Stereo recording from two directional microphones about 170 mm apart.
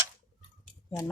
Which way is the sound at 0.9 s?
20° left (ahead or behind).